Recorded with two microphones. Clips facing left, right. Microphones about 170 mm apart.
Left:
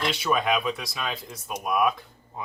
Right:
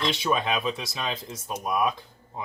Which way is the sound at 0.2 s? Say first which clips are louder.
Left 1 dB; 25° right (ahead or behind).